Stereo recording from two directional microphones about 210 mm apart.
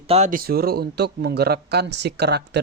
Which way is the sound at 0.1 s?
35° right (ahead or behind).